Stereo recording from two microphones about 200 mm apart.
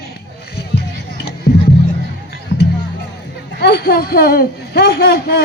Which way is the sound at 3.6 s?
50° left (ahead or behind).